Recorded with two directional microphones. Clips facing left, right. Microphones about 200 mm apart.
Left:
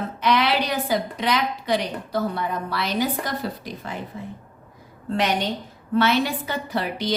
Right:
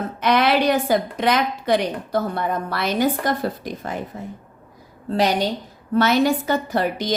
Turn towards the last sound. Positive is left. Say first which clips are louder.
# right 4 dB
turn(degrees=-45)  # may be behind; listen again after turning